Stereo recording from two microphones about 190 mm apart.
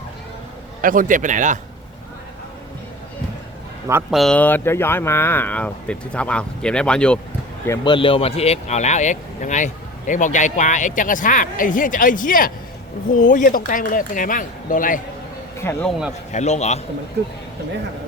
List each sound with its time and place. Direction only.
0.8 s speech: 45° right (ahead or behind)
4.1 s speech: centre (ahead or behind)
7.7 s speech: 25° left (ahead or behind); by 15.0 s 45° left (ahead or behind)
15.5 s speech: 10° left (ahead or behind)
15.9 s a man's voice: 5° right (ahead or behind)
16.3 s speech: 35° left (ahead or behind)